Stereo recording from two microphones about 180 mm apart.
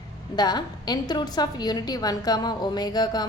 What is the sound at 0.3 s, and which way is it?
A woman's voice, 25° left (ahead or behind).